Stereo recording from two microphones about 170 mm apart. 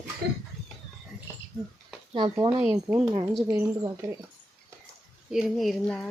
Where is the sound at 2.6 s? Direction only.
10° right (ahead or behind).